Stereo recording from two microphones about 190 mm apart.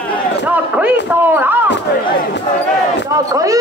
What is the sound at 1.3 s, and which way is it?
Speech, 10° right (ahead or behind).